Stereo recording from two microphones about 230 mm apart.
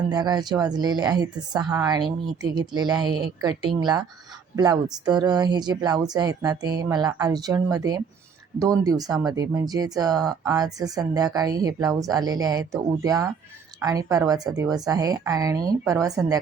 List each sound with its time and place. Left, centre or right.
0.1 s speech: centre